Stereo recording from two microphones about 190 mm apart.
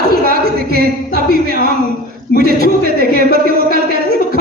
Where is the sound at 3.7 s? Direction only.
55° right (ahead or behind).